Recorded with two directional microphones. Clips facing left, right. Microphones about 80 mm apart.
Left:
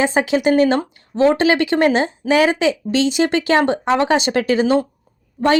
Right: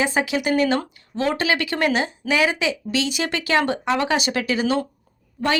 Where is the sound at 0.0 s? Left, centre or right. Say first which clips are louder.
Left 5 dB; left.